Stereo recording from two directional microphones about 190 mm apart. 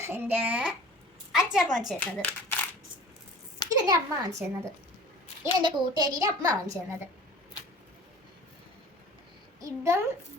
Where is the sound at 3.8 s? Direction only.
20° right (ahead or behind).